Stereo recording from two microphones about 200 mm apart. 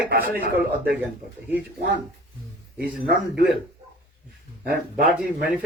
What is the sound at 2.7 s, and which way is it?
Speech, 50° right (ahead or behind).